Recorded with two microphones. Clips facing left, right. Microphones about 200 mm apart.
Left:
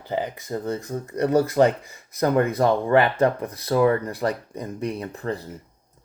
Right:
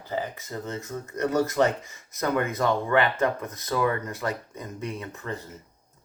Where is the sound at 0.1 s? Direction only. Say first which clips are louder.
Left 4 dB; 15° left (ahead or behind).